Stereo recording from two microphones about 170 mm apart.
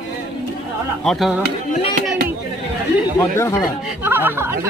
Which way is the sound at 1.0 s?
Centre (ahead or behind).